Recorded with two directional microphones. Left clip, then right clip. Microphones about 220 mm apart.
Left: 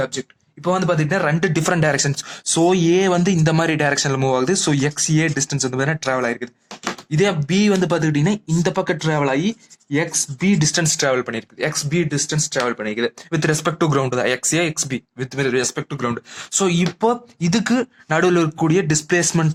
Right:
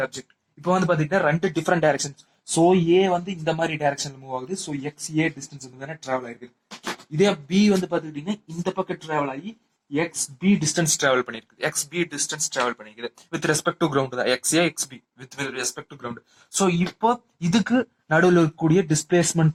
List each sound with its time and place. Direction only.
0.6 s speech: 30° left (ahead or behind)
13.7 s speech: 35° left (ahead or behind)